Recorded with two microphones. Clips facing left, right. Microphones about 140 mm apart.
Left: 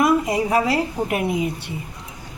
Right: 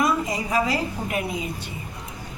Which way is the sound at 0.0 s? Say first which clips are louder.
Left 5 dB; 65° left (ahead or behind).